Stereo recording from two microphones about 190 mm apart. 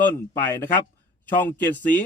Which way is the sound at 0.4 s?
10° left (ahead or behind).